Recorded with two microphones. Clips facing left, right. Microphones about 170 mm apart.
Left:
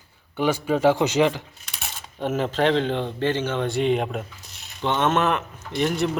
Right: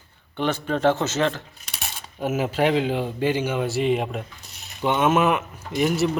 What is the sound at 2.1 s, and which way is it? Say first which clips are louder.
A man's voice: even; 10° right (ahead or behind).